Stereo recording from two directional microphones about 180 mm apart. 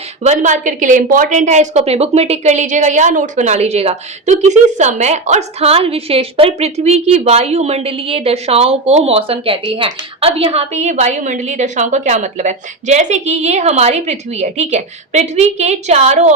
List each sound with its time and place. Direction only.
0.2 s a woman's voice: 40° right (ahead or behind)